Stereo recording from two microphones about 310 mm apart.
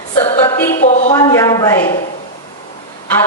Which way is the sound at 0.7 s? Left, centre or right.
Left.